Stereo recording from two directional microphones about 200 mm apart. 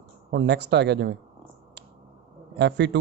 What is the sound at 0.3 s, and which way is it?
Speech, 60° right (ahead or behind).